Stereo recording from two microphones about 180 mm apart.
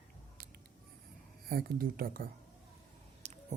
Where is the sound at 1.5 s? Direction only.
60° right (ahead or behind).